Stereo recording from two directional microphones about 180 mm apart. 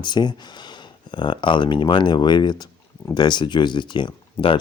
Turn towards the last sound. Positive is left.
turn(degrees=25)  # may be behind; listen again after turning